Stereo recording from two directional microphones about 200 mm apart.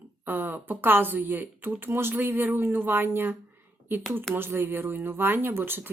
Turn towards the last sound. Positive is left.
turn(degrees=-10)  # may be behind; listen again after turning